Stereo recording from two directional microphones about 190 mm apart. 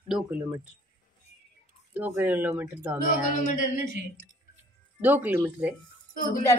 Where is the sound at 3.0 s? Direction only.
45° left (ahead or behind).